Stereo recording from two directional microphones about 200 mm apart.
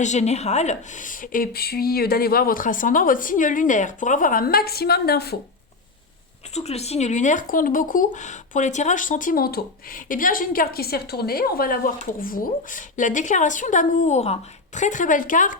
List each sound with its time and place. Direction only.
0.0 s a woman's voice: 35° left (ahead or behind); by 5.4 s 55° left (ahead or behind)
6.5 s speech: 30° left (ahead or behind)